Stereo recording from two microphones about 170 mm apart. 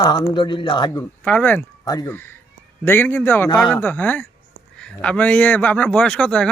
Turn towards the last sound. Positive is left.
turn(degrees=5)  # may be behind; listen again after turning